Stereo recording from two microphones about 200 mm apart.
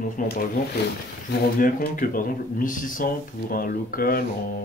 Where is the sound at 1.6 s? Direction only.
45° left (ahead or behind).